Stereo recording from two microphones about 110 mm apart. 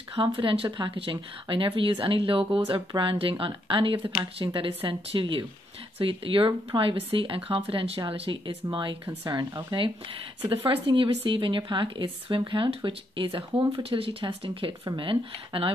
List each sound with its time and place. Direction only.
0.1 s speech: 55° right (ahead or behind)